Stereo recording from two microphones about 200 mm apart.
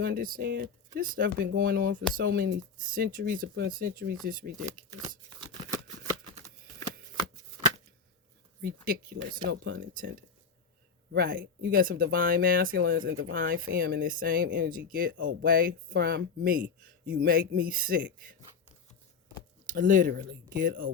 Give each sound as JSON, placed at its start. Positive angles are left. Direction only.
{"t": 0.0, "sound": "speech", "side_deg": -45}
{"t": 8.6, "sound": "speech", "side_deg": -45}
{"t": 11.1, "sound": "speech", "side_deg": -45}
{"t": 19.6, "sound": "speech", "side_deg": -40}